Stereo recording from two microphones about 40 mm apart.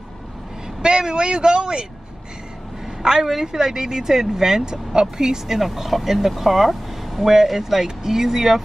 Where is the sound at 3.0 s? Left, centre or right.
Centre.